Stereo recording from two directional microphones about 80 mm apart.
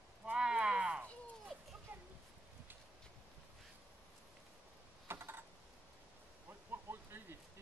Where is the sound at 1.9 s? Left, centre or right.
Right.